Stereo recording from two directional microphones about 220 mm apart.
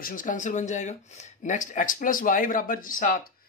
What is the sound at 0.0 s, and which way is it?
Speech, 35° left (ahead or behind).